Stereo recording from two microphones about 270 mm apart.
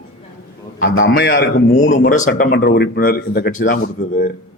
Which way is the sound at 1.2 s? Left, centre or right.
Left.